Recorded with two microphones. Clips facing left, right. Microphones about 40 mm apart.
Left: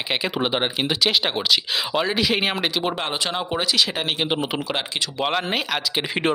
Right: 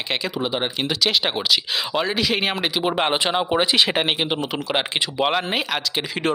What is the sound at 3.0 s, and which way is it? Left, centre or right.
Speech, right.